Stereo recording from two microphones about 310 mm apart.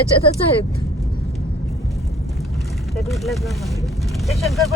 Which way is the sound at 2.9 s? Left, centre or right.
Centre.